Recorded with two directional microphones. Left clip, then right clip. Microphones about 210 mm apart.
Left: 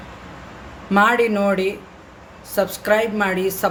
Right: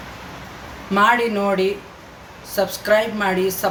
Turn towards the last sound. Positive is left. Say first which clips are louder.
# even
turn(degrees=40)  # may be behind; listen again after turning